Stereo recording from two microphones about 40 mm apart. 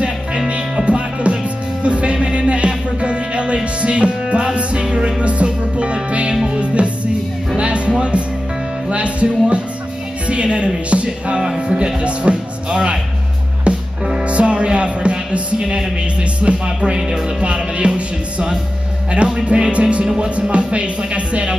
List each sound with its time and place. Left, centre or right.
0.7 s music: right
19.1 s music: centre
20.2 s speech: right